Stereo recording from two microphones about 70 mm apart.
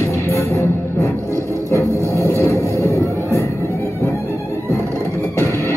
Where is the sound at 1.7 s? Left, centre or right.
Left.